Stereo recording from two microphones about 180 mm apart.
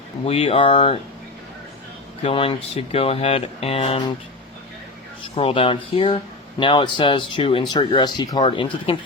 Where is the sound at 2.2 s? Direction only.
30° left (ahead or behind).